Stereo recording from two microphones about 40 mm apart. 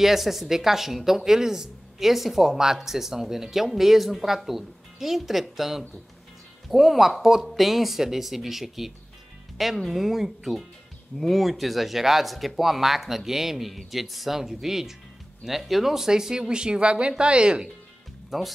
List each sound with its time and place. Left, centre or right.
0.0 s speech: centre
11.1 s speech: centre; by 17.6 s right
18.3 s speech: centre